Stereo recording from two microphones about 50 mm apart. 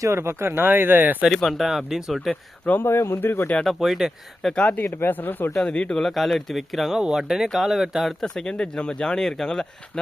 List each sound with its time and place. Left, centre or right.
0.0 s speech: right
1.3 s speech: centre
2.8 s speech: left
3.7 s speech: centre
4.4 s speech: centre
4.9 s speech: left
5.5 s speech: centre
6.0 s speech: centre
6.9 s speech: centre
8.2 s speech: centre